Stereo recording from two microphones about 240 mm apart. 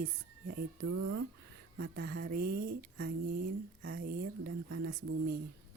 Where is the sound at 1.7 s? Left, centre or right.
Right.